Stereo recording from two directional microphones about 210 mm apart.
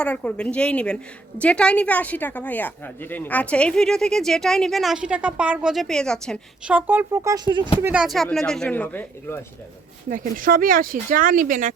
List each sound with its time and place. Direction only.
0.0 s speech: 5° left (ahead or behind)
6.7 s speech: 10° right (ahead or behind)
7.8 s speech: 10° right (ahead or behind)
8.0 s speech: centre (ahead or behind)
10.1 s speech: 40° right (ahead or behind)